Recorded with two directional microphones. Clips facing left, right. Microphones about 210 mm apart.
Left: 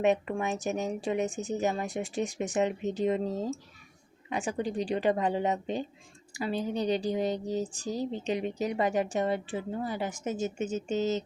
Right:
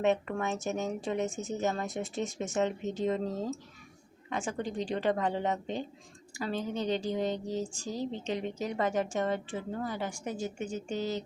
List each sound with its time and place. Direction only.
0.0 s a woman's voice: 15° left (ahead or behind)
7.9 s a woman's voice: 40° left (ahead or behind)
8.2 s a woman's voice: 15° left (ahead or behind)